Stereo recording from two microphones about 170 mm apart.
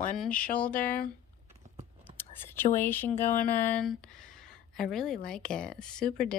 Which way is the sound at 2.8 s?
10° left (ahead or behind).